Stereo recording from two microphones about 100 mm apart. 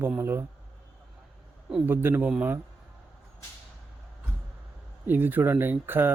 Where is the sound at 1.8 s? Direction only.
20° right (ahead or behind).